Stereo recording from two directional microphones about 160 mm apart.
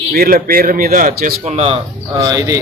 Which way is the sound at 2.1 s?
20° right (ahead or behind).